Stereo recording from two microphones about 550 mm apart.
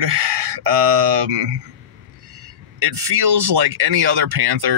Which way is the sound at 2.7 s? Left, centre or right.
Right.